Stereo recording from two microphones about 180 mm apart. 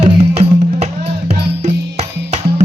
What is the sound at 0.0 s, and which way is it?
Music, 35° right (ahead or behind).